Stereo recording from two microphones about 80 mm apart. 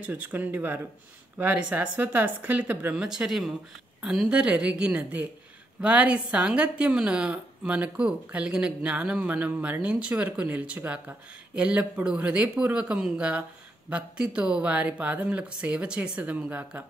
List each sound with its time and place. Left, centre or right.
0.0 s speech: centre
3.0 s a woman's voice: centre